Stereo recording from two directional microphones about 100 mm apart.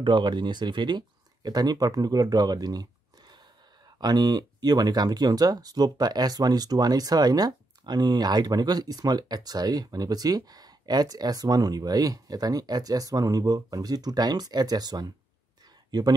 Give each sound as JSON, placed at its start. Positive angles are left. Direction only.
{"t": 0.0, "sound": "speech", "side_deg": -50}